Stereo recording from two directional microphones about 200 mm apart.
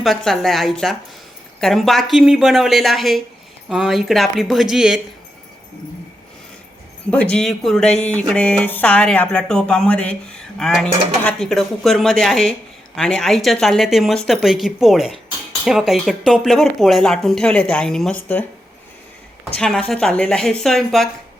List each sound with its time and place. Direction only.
0.0 s speech: centre (ahead or behind)
7.1 s speech: 5° left (ahead or behind)
19.5 s speech: 5° left (ahead or behind)